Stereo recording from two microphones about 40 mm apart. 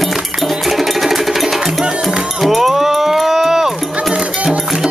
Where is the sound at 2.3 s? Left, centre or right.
Centre.